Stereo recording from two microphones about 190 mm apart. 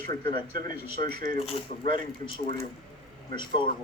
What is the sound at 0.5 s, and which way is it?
Speech, 55° right (ahead or behind).